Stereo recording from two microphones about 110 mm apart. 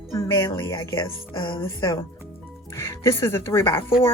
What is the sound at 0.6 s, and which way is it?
Speech, 40° left (ahead or behind).